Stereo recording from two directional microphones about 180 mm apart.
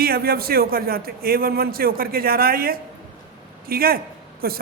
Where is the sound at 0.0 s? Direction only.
55° right (ahead or behind).